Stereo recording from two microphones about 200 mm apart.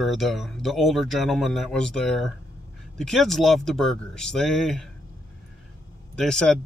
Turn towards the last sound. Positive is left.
turn(degrees=5)  # may be behind; listen again after turning